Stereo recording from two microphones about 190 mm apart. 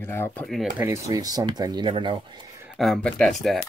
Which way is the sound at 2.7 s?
Centre (ahead or behind).